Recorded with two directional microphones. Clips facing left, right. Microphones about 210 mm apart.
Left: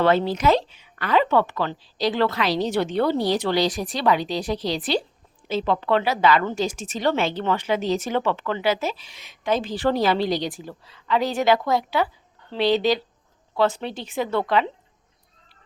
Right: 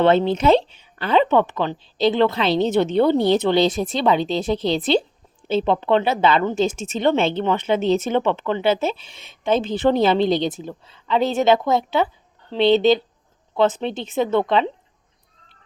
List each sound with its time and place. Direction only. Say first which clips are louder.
0.0 s a woman's voice: right 3 dB; 25° right (ahead or behind)